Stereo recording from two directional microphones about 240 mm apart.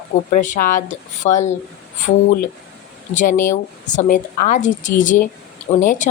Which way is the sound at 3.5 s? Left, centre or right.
Left.